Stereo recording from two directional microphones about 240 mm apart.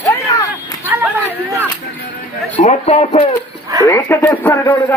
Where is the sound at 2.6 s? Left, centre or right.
Left.